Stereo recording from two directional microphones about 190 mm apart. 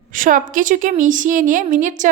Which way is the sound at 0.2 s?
45° right (ahead or behind).